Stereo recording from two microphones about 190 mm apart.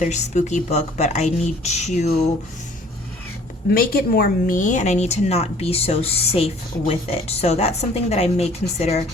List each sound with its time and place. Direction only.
0.0 s speech: 40° left (ahead or behind)
3.7 s speech: 55° left (ahead or behind); by 9.0 s 35° left (ahead or behind)